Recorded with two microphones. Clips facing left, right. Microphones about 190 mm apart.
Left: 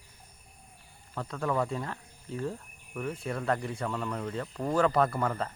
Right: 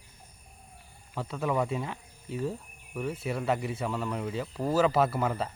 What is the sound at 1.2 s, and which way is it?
Speech, 5° right (ahead or behind).